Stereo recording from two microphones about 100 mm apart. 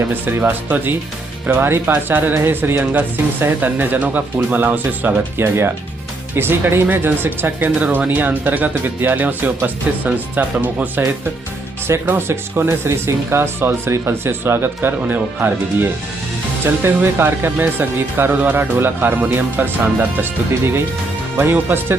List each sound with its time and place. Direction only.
0.1 s speech: 20° right (ahead or behind)
21.3 s speech: 20° right (ahead or behind)